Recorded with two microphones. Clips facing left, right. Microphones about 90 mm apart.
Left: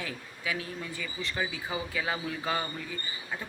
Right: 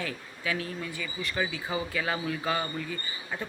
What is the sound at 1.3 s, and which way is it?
Speech, 15° left (ahead or behind).